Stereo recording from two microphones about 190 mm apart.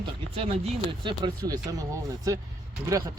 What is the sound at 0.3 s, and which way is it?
Speech, 30° right (ahead or behind).